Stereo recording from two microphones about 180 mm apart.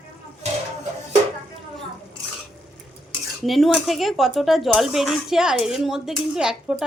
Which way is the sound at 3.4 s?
Centre (ahead or behind).